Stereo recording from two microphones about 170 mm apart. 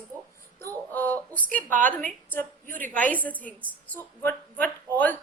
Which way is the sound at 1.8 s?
10° left (ahead or behind).